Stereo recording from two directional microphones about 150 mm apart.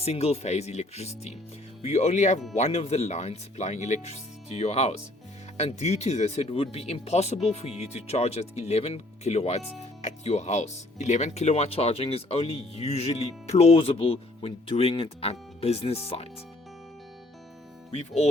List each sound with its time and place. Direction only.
0.0 s speech: 45° left (ahead or behind)
17.9 s speech: 45° left (ahead or behind)